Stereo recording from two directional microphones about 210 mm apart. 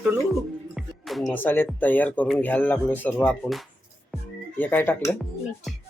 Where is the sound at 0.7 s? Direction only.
Centre (ahead or behind).